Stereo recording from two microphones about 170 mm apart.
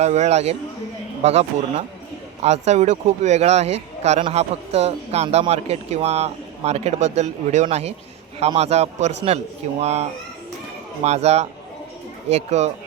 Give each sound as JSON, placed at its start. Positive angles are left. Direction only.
{"t": 0.0, "sound": "speech", "side_deg": -40}